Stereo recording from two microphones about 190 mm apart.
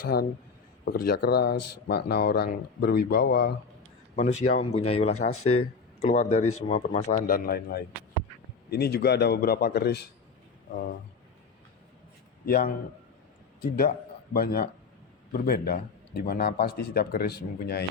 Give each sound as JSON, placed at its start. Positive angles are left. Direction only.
{"t": 0.9, "sound": "speech", "side_deg": 55}
{"t": 4.1, "sound": "speech", "side_deg": 35}
{"t": 7.3, "sound": "a man's voice", "side_deg": 50}
{"t": 12.5, "sound": "a man's voice", "side_deg": 50}
{"t": 14.3, "sound": "a man's voice", "side_deg": 55}